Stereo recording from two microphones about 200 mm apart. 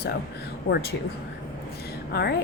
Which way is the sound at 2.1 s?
50° left (ahead or behind).